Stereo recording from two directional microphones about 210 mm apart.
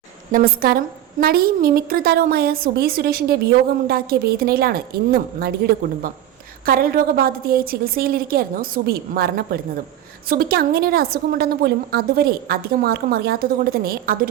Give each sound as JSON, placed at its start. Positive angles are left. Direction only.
{"t": 0.3, "sound": "a woman's voice", "side_deg": -45}